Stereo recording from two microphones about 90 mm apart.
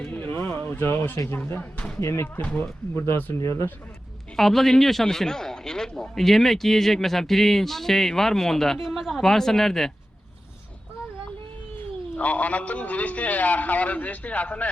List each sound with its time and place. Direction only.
0.0 s a sound: 20° left (ahead or behind)
0.5 s speech: 20° left (ahead or behind)
2.0 s speech: 30° left (ahead or behind)
4.4 s speech: centre (ahead or behind)
11.8 s a man's voice: 20° left (ahead or behind)